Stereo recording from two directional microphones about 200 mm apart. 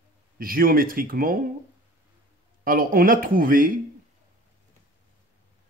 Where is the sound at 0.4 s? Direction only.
45° right (ahead or behind).